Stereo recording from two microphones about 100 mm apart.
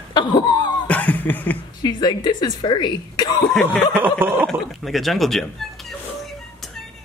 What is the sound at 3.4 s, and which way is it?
Speech, 10° left (ahead or behind).